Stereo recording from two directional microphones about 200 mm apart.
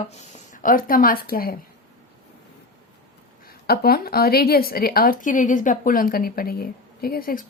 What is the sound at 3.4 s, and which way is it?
Speech, 50° left (ahead or behind).